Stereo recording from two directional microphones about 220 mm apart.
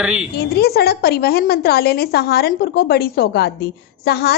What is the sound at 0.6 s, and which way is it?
A woman's voice, 45° left (ahead or behind).